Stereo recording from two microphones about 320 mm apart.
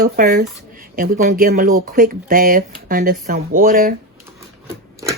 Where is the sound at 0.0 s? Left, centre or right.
Right.